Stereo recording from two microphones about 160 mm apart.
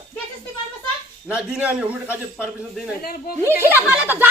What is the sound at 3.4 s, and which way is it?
Speech, 15° right (ahead or behind).